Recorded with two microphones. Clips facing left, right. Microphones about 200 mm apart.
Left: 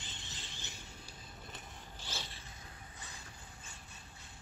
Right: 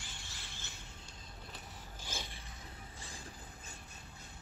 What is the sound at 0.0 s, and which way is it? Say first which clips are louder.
Vehicle: left 1 dB; 20° left (ahead or behind).